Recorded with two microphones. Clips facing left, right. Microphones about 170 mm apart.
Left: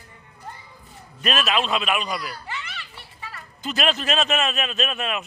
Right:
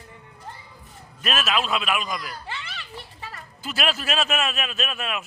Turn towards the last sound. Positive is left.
turn(degrees=0)  # may be behind; listen again after turning